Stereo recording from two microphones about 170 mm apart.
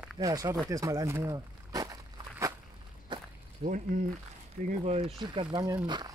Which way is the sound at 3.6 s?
55° right (ahead or behind).